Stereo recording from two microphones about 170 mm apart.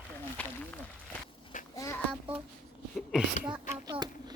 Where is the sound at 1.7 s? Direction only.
20° left (ahead or behind).